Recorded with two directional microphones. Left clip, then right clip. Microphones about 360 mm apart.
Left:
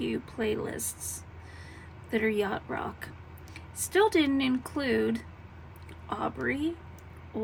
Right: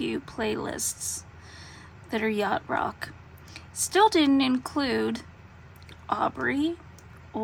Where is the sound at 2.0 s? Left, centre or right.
Centre.